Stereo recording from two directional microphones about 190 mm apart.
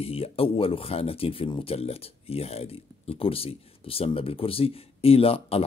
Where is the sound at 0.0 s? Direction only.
30° left (ahead or behind).